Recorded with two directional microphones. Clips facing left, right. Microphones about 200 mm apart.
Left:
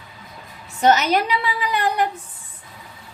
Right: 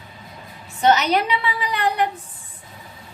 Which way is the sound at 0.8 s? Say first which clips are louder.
Left 1 dB; 45° left (ahead or behind).